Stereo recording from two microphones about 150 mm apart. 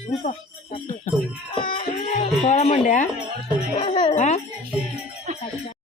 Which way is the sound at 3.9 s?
30° left (ahead or behind).